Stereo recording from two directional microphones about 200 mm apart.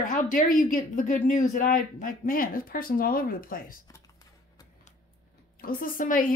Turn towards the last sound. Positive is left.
turn(degrees=45)  # may be behind; listen again after turning